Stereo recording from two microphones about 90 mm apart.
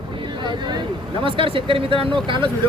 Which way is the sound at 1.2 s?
85° right.